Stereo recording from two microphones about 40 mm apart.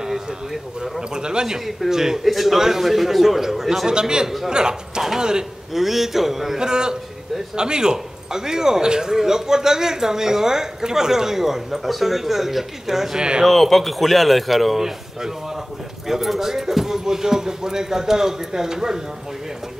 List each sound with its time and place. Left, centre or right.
0.0 s speech: centre
1.1 s a man's voice: centre
1.7 s speech: centre
3.9 s a man's voice: centre
5.7 s speech: centre
6.6 s a man's voice: centre
13.4 s a man's voice: centre